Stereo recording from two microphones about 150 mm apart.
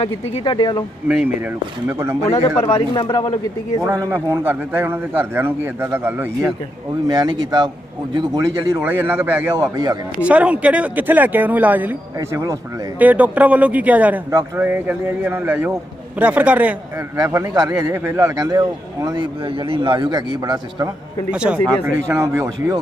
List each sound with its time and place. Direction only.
0.3 s speech: 30° left (ahead or behind)
1.0 s a man's voice: 5° right (ahead or behind)
2.6 s speech: 30° left (ahead or behind)
3.8 s a man's voice: 20° right (ahead or behind)
7.1 s a man's voice: 25° right (ahead or behind)
9.5 s a man's voice: 25° right (ahead or behind)
10.2 s a man's voice: 10° right (ahead or behind)
17.2 s a man's voice: 20° right (ahead or behind)
21.2 s a man's voice: 5° right (ahead or behind)
21.8 s a man's voice: 15° right (ahead or behind)